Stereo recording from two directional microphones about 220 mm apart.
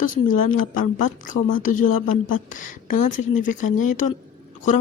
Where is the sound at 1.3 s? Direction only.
35° left (ahead or behind).